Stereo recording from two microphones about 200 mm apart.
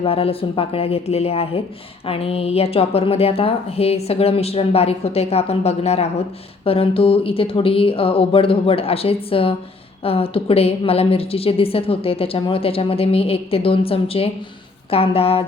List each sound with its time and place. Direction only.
0.0 s a woman's voice: 30° left (ahead or behind)